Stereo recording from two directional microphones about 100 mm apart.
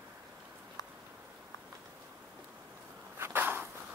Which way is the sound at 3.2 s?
20° right (ahead or behind).